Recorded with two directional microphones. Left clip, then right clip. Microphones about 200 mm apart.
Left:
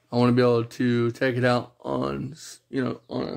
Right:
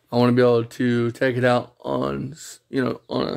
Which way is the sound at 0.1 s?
15° right (ahead or behind).